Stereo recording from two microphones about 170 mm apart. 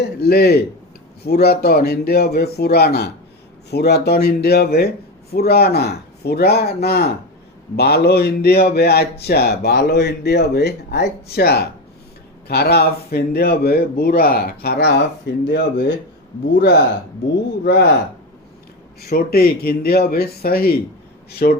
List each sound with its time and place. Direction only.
0.0 s speech: 70° left (ahead or behind)
15.4 s speech: 80° left
19.0 s speech: 65° left (ahead or behind)